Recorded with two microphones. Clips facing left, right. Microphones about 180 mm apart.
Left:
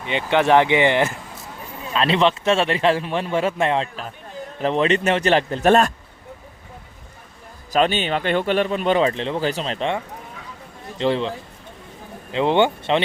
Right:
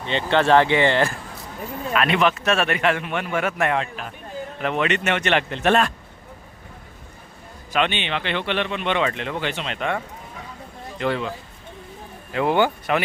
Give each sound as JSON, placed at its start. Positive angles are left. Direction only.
{"t": 0.0, "sound": "speech", "side_deg": 15}
{"t": 1.9, "sound": "a man's voice", "side_deg": 30}
{"t": 7.7, "sound": "a man's voice", "side_deg": 40}